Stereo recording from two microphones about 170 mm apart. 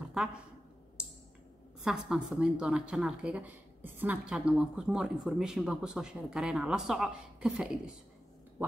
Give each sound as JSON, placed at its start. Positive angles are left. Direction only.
{"t": 0.1, "sound": "a woman's voice", "side_deg": -5}
{"t": 1.8, "sound": "speech", "side_deg": -5}